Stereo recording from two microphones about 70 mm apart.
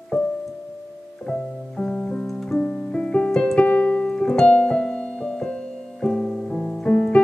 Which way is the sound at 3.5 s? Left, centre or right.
Centre.